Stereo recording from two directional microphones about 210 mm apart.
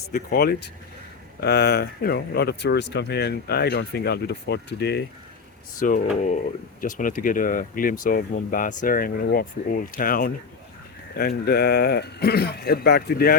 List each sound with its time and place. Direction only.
0.1 s speech: 45° left (ahead or behind)
5.8 s speech: 35° left (ahead or behind)